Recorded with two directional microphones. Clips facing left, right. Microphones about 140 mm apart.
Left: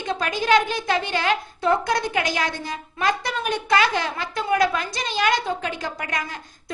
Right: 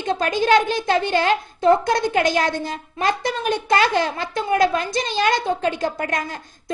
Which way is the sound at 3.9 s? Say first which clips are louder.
Right 4 dB; 45° right (ahead or behind).